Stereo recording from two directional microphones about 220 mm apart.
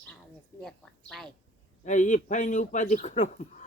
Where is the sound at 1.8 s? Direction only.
35° left (ahead or behind).